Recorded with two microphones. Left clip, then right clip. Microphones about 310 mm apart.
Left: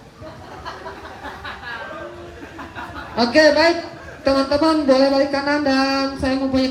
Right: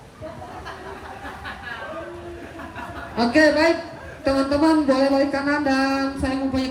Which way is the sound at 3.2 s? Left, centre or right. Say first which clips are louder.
Left 3 dB; centre.